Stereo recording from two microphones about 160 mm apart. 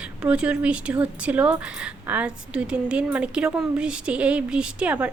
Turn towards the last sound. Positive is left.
turn(degrees=-10)  # may be behind; listen again after turning